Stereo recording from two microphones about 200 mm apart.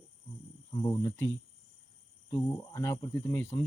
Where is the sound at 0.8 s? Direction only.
15° left (ahead or behind).